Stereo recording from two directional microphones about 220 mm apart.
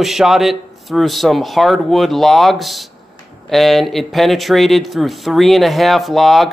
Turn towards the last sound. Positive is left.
turn(degrees=0)  # may be behind; listen again after turning